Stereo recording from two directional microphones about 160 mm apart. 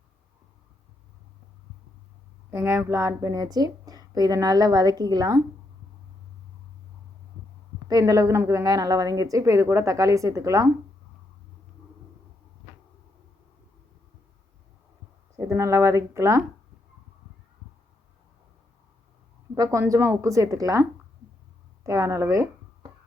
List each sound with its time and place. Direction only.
2.5 s a woman's voice: 15° right (ahead or behind)
7.9 s a woman's voice: 20° right (ahead or behind)
15.4 s speech: 20° right (ahead or behind)
19.5 s a woman's voice: 20° right (ahead or behind)
21.8 s a woman's voice: 20° right (ahead or behind)